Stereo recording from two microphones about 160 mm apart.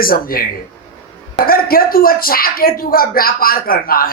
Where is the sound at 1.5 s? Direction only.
65° left (ahead or behind).